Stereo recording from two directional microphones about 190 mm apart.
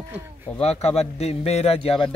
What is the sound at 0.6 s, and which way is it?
A man's voice, 35° left (ahead or behind).